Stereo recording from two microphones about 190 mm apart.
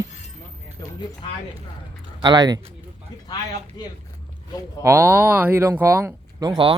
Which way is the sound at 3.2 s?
20° left (ahead or behind).